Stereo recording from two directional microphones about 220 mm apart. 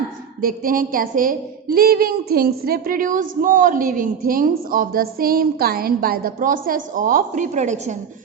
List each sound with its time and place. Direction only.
0.4 s a woman's voice: 40° right (ahead or behind)